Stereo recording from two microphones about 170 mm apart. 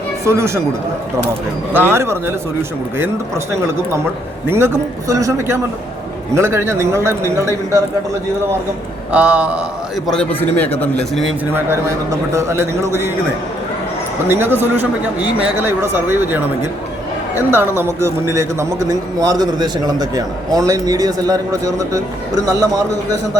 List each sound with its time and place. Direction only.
0.3 s a man's voice: 15° right (ahead or behind)
9.1 s a man's voice: 5° right (ahead or behind)
10.1 s speech: 5° left (ahead or behind)
11.5 s a man's voice: 15° right (ahead or behind)
14.3 s a man's voice: 15° right (ahead or behind)